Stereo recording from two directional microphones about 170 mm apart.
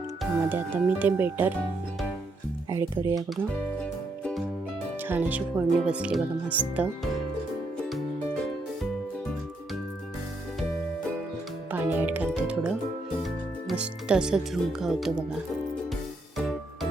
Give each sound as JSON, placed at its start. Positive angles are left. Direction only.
{"t": 0.4, "sound": "speech", "side_deg": -10}
{"t": 2.6, "sound": "speech", "side_deg": -20}
{"t": 3.8, "sound": "music", "side_deg": 5}
{"t": 5.0, "sound": "speech", "side_deg": -10}
{"t": 7.8, "sound": "music", "side_deg": 0}
{"t": 11.7, "sound": "music", "side_deg": -10}
{"t": 13.7, "sound": "speech", "side_deg": -5}